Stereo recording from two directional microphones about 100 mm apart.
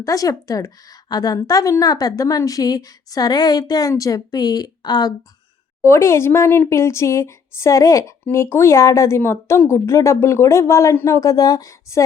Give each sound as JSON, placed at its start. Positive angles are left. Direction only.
{"t": 0.0, "sound": "a woman's voice", "side_deg": 35}
{"t": 5.8, "sound": "a woman's voice", "side_deg": 25}